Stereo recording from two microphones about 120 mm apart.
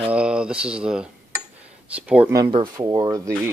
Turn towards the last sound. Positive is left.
turn(degrees=-30)  # may be behind; listen again after turning